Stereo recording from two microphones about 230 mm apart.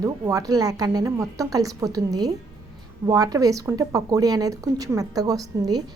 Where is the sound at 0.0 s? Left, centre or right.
Centre.